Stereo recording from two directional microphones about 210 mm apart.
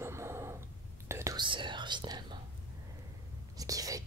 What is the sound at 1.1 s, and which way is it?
Whispering, 15° right (ahead or behind).